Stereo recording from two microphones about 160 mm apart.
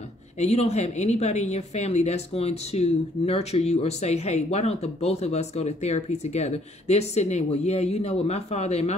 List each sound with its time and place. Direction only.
0.4 s speech: 45° left (ahead or behind)